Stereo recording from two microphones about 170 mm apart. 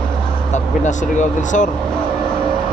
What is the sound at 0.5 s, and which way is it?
Speech, 45° left (ahead or behind).